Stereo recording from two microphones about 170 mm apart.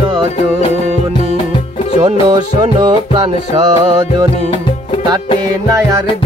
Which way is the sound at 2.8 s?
30° right (ahead or behind).